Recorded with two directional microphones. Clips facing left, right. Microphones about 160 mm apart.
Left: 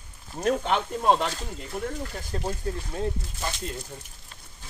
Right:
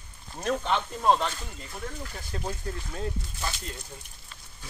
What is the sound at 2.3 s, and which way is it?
Speech, 35° left (ahead or behind).